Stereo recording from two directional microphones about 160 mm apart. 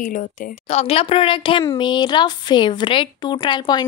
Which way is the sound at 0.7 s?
40° left (ahead or behind).